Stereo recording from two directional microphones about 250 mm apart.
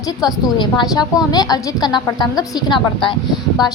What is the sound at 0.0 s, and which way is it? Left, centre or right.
A woman's voice, centre.